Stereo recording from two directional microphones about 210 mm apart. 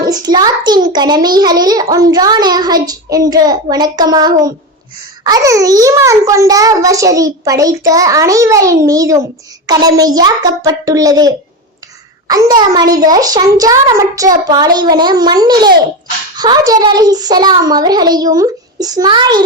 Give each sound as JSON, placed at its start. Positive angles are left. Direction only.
{"t": 0.0, "sound": "a child's voice", "side_deg": -20}